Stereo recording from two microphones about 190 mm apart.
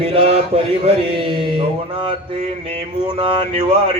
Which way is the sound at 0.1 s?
30° right (ahead or behind).